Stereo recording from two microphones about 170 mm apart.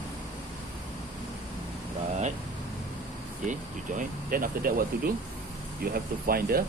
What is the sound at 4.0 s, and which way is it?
Speech, 55° right (ahead or behind).